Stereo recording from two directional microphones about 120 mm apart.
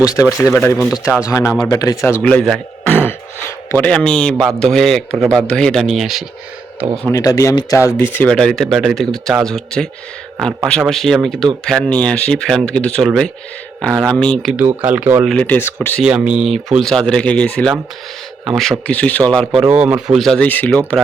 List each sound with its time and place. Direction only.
0.3 s speech: 20° left (ahead or behind)
2.2 s a man's voice: 5° left (ahead or behind)
2.8 s throat clearing: 15° left (ahead or behind)
3.7 s a man's voice: 10° left (ahead or behind)
7.1 s speech: 25° left (ahead or behind)
8.3 s a man's voice: 5° left (ahead or behind)
14.5 s speech: 15° right (ahead or behind)
15.3 s speech: 10° left (ahead or behind)
16.0 s a man's voice: 10° right (ahead or behind); by 19.5 s 10° left (ahead or behind)
19.6 s speech: 10° right (ahead or behind)
20.1 s a man's voice: 5° left (ahead or behind)